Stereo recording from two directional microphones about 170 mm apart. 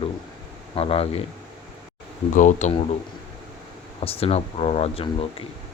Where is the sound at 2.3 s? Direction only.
45° left (ahead or behind).